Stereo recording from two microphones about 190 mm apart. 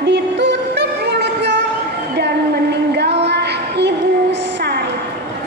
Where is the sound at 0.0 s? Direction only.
65° right (ahead or behind).